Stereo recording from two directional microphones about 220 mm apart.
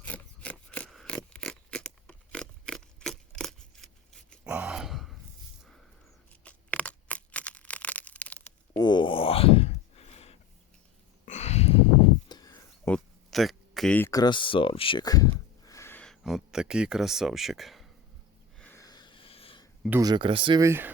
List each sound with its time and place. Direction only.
0.0 s scissors: 5° left (ahead or behind)
6.4 s crushing: 5° left (ahead or behind)
8.8 s a sound: 20° left (ahead or behind)
12.9 s speech: centre (ahead or behind)
18.6 s a sound: 10° left (ahead or behind)
20.0 s speech: 20° right (ahead or behind)